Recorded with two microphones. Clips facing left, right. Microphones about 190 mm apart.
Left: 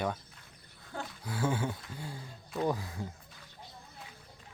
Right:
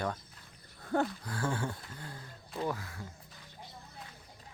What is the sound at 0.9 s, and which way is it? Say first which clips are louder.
Speech: right 11 dB; 55° right (ahead or behind).